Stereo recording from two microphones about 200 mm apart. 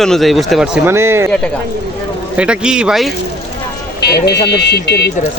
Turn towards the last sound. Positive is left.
turn(degrees=55)  # may be behind; listen again after turning